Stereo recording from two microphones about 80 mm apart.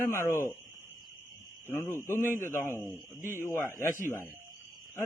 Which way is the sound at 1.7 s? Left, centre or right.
Left.